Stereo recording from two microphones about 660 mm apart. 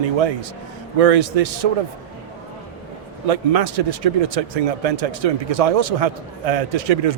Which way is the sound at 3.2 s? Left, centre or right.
Right.